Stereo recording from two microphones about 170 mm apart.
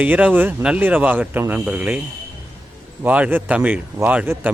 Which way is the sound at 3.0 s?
10° right (ahead or behind).